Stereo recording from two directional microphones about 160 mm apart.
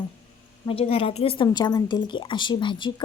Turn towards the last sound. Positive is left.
turn(degrees=30)  # may be behind; listen again after turning